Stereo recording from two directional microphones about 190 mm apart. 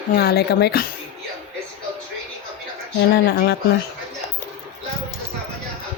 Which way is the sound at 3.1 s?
60° left (ahead or behind).